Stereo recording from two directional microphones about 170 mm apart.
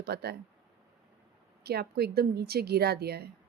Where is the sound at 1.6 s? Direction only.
70° right (ahead or behind).